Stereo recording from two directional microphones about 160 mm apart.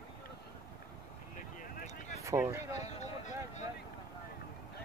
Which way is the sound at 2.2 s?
15° right (ahead or behind).